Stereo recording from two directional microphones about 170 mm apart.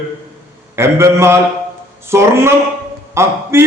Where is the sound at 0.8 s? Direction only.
15° right (ahead or behind).